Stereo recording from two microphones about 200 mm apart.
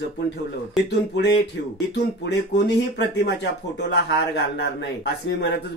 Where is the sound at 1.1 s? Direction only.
55° left (ahead or behind).